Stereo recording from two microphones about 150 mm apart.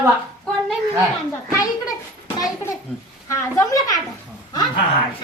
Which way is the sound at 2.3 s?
25° left (ahead or behind).